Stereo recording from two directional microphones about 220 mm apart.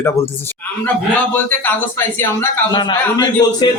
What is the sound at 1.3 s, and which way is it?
A man's voice, 10° left (ahead or behind).